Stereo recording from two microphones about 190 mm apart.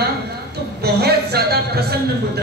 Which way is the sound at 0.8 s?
55° right (ahead or behind).